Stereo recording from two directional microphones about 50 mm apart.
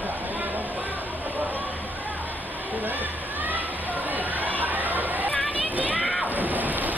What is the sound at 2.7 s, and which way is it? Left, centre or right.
Music, right.